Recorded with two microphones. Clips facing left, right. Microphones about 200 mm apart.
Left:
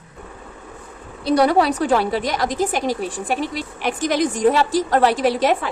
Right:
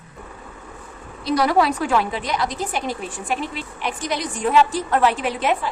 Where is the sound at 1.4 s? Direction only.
30° left (ahead or behind).